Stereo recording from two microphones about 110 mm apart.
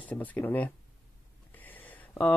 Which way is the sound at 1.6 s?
15° left (ahead or behind).